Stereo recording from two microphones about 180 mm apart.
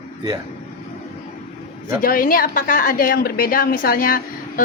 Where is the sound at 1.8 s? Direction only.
50° left (ahead or behind).